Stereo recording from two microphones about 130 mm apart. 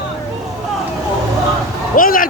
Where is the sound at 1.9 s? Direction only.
90° left.